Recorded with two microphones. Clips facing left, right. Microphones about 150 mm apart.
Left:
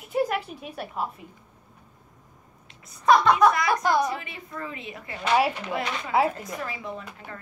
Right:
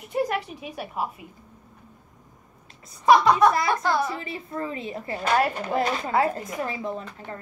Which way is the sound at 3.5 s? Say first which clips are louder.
Right 1 dB; 30° right (ahead or behind).